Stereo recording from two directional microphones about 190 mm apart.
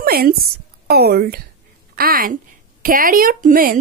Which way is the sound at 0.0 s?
50° right (ahead or behind).